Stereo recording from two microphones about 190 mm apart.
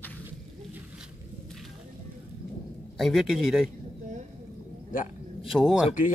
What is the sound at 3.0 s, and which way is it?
Speech, centre (ahead or behind).